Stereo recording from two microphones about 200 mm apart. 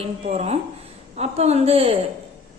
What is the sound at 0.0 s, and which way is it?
A woman's voice, 35° right (ahead or behind).